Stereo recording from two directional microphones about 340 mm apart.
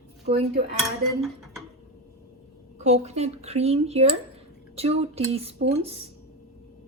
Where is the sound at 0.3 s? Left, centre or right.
Centre.